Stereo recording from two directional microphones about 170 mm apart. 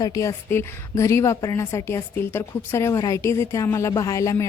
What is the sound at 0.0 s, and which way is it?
A woman's voice, 20° left (ahead or behind).